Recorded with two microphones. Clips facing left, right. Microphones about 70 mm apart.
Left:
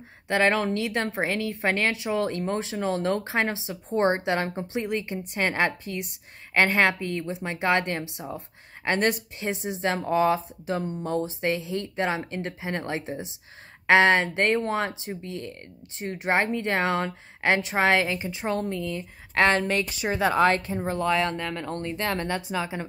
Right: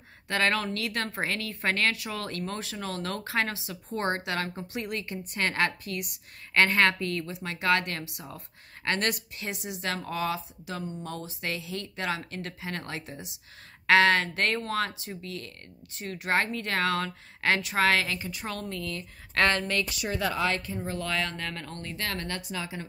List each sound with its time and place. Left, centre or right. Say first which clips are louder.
0.3 s speech: left 5 dB; left
11.1 s speech: left 13 dB; left
20.3 s speech: left 8 dB; left